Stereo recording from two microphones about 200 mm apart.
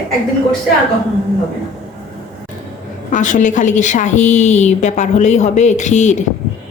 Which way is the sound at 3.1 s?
40° left (ahead or behind).